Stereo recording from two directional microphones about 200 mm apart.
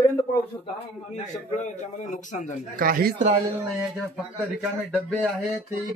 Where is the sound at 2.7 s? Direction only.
45° right (ahead or behind).